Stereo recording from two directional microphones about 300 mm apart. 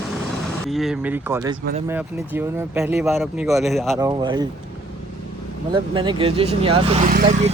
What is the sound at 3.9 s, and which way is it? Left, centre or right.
Speech, centre.